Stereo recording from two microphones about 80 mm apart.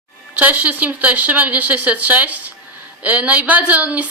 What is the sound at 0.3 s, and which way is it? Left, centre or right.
A woman's voice, right.